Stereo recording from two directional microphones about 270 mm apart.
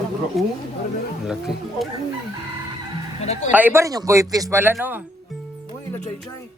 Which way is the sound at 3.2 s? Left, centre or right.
Left.